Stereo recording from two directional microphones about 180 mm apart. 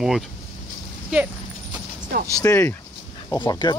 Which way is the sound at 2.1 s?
65° right (ahead or behind).